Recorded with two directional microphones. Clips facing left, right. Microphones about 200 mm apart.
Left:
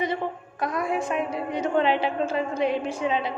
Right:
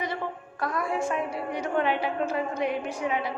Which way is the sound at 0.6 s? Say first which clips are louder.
Left 2 dB; 20° left (ahead or behind).